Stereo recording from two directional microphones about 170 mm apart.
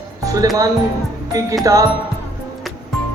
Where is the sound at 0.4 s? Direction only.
20° right (ahead or behind).